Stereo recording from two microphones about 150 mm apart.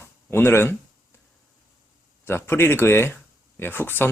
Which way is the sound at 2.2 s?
15° left (ahead or behind).